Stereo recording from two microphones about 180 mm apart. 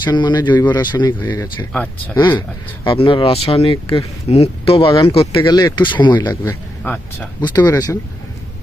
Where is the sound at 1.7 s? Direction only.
10° left (ahead or behind).